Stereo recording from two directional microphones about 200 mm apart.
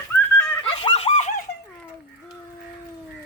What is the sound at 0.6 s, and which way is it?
Giggle, 30° left (ahead or behind).